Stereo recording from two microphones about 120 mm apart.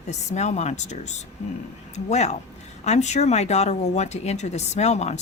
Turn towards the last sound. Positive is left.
turn(degrees=70)  # may be behind; listen again after turning